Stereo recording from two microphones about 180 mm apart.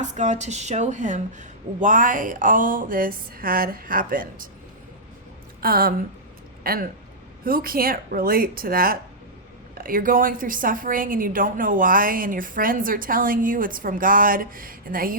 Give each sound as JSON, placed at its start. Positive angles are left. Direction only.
{"t": 0.0, "sound": "a woman's voice", "side_deg": -40}
{"t": 5.5, "sound": "a woman's voice", "side_deg": -55}